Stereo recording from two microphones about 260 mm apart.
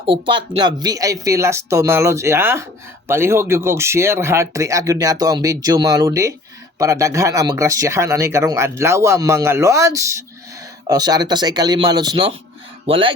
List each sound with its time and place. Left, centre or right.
0.0 s speech: centre